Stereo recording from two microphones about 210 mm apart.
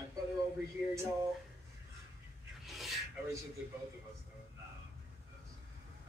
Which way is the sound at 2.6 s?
Centre (ahead or behind).